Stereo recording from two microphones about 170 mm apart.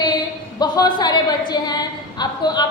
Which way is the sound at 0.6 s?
25° left (ahead or behind).